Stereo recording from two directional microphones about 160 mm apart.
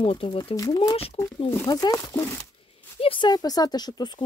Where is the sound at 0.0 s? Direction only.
35° left (ahead or behind).